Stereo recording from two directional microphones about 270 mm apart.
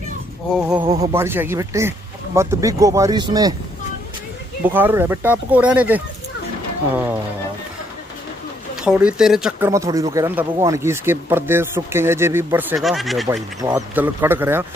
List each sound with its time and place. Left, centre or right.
0.6 s speech: centre
0.8 s speech: centre
1.1 s speech: centre
4.6 s speech: centre
8.8 s speech: centre
13.6 s speech: centre